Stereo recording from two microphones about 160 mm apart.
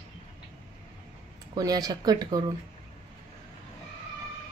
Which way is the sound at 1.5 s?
25° right (ahead or behind).